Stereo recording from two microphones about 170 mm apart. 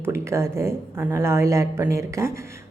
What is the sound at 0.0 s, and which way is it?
A woman's voice, 15° right (ahead or behind).